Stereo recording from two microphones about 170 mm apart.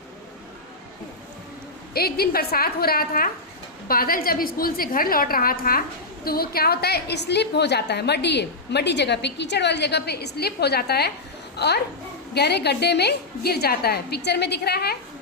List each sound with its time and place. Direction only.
1.9 s a woman's voice: 65° left (ahead or behind)